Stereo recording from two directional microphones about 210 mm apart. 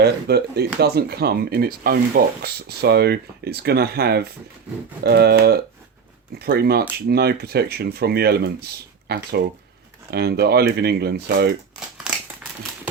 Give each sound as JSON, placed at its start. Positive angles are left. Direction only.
{"t": 0.0, "sound": "speech", "side_deg": -50}